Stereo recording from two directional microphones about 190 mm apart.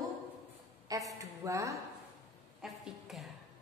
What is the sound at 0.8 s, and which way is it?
Speech, 15° right (ahead or behind).